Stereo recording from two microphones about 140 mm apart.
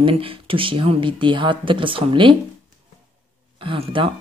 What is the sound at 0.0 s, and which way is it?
Speech, 40° right (ahead or behind).